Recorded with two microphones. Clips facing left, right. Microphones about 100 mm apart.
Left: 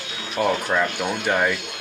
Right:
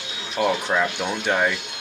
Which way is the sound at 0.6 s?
Centre (ahead or behind).